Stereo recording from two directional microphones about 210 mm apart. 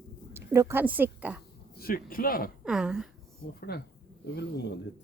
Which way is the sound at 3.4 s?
45° left (ahead or behind).